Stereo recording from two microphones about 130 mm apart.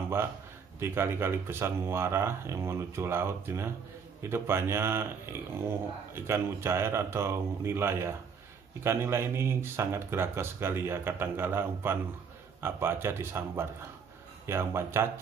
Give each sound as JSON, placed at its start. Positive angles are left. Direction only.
{"t": 0.7, "sound": "speech", "side_deg": -20}